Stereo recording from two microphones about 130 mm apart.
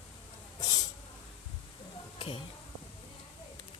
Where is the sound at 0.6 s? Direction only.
35° left (ahead or behind).